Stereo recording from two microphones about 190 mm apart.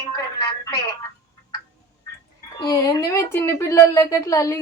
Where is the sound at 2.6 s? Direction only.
20° left (ahead or behind).